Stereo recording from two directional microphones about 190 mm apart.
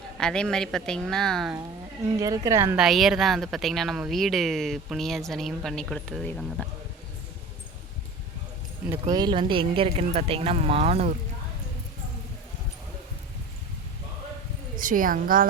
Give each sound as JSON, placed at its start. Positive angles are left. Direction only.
{"t": 0.2, "sound": "speech", "side_deg": 5}
{"t": 2.1, "sound": "a woman's voice", "side_deg": -20}
{"t": 2.7, "sound": "speech", "side_deg": 0}
{"t": 8.9, "sound": "speech", "side_deg": -20}
{"t": 14.8, "sound": "a woman's voice", "side_deg": -45}